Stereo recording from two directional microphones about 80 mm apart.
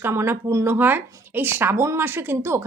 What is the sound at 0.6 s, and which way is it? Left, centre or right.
Speech, right.